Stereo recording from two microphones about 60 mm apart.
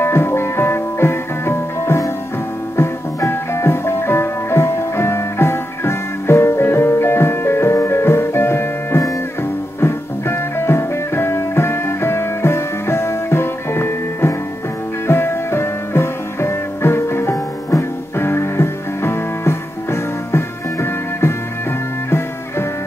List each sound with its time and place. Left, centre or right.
0.0 s music: left
3.3 s music: left